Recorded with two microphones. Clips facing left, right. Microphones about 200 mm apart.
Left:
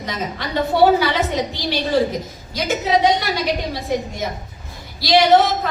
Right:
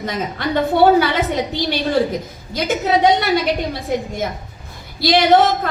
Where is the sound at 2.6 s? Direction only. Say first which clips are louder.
Right 1 dB; 55° right (ahead or behind).